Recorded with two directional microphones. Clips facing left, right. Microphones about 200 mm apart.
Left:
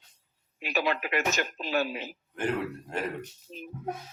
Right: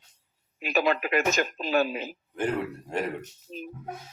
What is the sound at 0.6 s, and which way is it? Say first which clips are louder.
Speech: right 4 dB; 50° right (ahead or behind).